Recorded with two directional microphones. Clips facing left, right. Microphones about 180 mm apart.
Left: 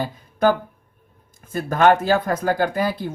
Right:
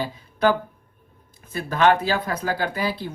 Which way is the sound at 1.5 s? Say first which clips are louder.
Left 3 dB; 45° left (ahead or behind).